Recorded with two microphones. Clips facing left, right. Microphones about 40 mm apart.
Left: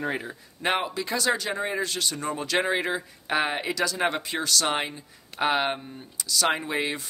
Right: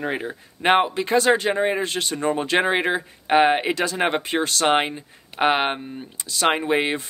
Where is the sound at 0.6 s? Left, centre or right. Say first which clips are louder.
Right 8 dB; right.